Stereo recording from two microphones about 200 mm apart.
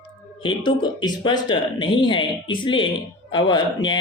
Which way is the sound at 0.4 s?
20° left (ahead or behind).